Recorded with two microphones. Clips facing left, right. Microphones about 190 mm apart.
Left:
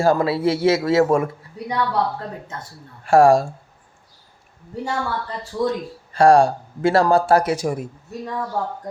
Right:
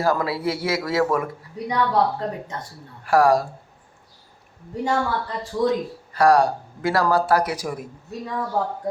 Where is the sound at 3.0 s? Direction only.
25° left (ahead or behind).